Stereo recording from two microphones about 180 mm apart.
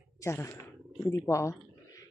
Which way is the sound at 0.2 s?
15° left (ahead or behind).